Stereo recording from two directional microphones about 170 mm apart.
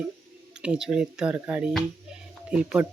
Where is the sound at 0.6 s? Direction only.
5° right (ahead or behind).